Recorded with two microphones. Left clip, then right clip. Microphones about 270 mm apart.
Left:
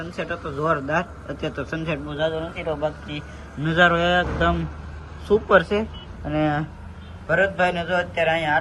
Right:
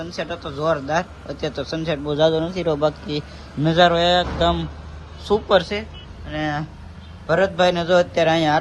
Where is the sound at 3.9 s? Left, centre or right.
Centre.